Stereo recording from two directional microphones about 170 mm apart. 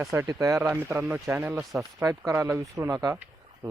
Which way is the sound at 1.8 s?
20° right (ahead or behind).